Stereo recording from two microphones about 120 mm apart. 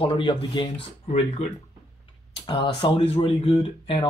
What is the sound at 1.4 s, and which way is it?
Speech, 65° left (ahead or behind).